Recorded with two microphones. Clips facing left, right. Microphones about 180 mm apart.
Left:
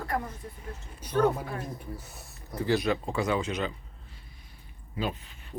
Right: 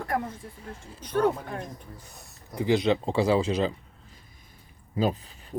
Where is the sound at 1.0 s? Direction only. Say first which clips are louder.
Right 1 dB; 10° left (ahead or behind).